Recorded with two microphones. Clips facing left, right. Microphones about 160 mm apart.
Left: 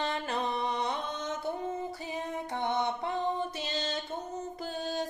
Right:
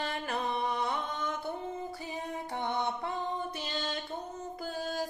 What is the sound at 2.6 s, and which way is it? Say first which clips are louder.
Music: left 2 dB; 20° left (ahead or behind).